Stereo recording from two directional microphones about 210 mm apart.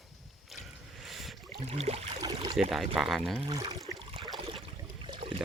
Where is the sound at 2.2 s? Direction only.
20° right (ahead or behind).